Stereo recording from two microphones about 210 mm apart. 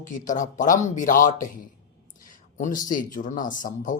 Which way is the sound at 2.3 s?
35° left (ahead or behind).